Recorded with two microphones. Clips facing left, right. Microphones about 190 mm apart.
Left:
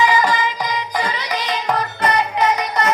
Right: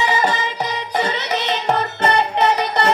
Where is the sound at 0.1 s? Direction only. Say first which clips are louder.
Left 2 dB; 25° right (ahead or behind).